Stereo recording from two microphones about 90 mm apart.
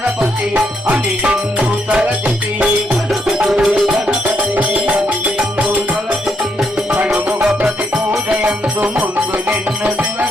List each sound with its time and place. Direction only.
0.2 s music: 15° right (ahead or behind)